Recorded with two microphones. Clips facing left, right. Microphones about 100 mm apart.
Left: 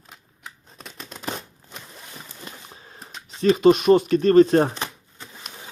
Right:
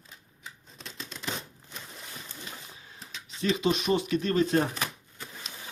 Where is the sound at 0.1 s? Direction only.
60° left (ahead or behind).